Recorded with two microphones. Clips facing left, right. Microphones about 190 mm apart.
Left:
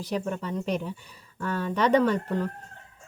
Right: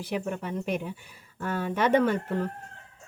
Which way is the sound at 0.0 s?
10° right (ahead or behind).